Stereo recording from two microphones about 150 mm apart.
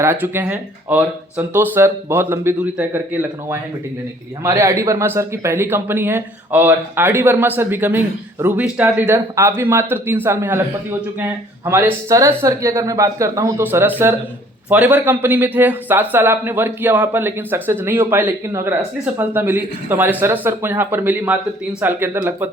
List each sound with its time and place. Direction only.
0.0 s speech: 15° right (ahead or behind)